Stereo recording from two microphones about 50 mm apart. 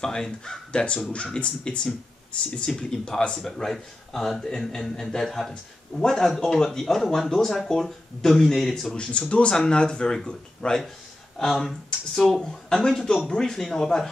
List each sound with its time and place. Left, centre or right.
0.0 s a man's voice: centre
8.9 s a man's voice: left
12.2 s a man's voice: centre